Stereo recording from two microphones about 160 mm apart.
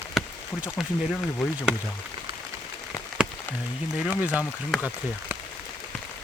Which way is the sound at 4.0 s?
10° right (ahead or behind).